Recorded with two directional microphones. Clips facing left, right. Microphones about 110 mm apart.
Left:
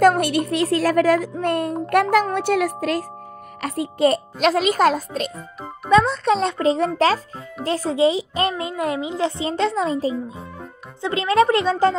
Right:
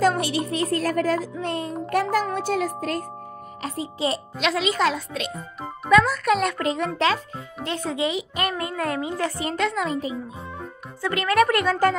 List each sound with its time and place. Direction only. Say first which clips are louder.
0.0 s a woman's voice: left 5 dB; 55° left (ahead or behind); by 3.1 s 85° left
3.6 s speech: left 8 dB; 60° left (ahead or behind); by 5.3 s 40° left (ahead or behind)
5.9 s a child's voice: left 2 dB; 25° left (ahead or behind)